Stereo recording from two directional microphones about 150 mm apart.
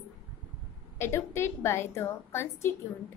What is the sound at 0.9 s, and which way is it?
A child's voice, 15° left (ahead or behind).